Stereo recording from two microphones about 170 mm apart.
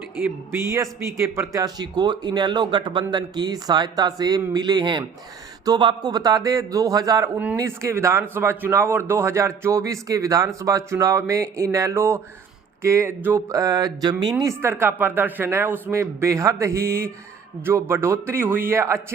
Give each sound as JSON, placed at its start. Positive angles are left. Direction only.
{"t": 0.7, "sound": "speech", "side_deg": -15}
{"t": 14.4, "sound": "speech", "side_deg": -15}